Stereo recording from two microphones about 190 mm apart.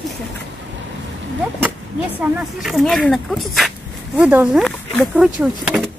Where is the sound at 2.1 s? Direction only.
5° right (ahead or behind).